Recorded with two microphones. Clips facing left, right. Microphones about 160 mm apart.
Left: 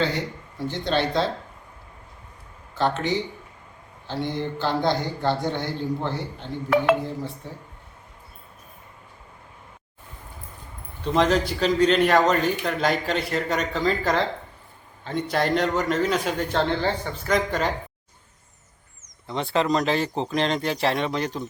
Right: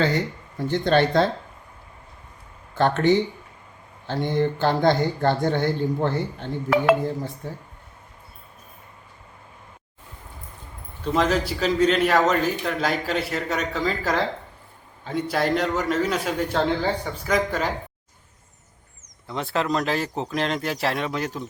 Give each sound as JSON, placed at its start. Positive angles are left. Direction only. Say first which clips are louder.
{"t": 0.7, "sound": "speech", "louder": "right 5 dB", "side_deg": -55}
{"t": 2.7, "sound": "speech", "louder": "right 5 dB", "side_deg": -55}
{"t": 11.0, "sound": "a man's voice", "louder": "left 1 dB", "side_deg": -5}
{"t": 19.3, "sound": "a man's voice", "louder": "left 2 dB", "side_deg": 0}